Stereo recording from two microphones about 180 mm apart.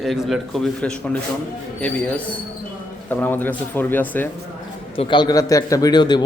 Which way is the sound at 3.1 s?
10° left (ahead or behind).